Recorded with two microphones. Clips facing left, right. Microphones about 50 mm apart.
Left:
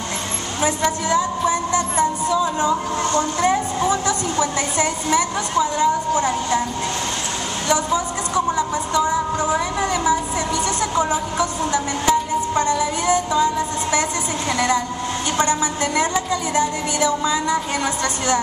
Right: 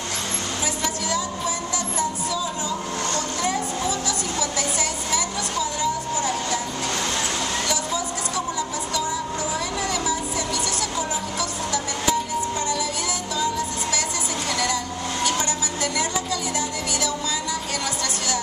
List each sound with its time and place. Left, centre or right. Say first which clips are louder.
0.6 s a woman's voice: left 9 dB; left
7.6 s a sound: left 6 dB; left
9.0 s speech: left 7 dB; left
12.7 s music: left 8 dB; left
15.3 s a woman's voice: left 6 dB; left